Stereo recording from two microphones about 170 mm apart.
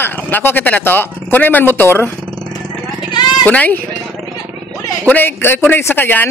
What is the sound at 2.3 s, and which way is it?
Vehicle, 30° right (ahead or behind).